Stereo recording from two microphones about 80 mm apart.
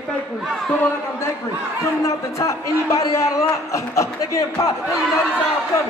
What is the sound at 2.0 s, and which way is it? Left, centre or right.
A man's voice, left.